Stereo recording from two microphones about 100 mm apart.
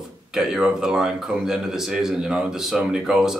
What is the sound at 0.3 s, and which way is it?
Speech, 5° right (ahead or behind).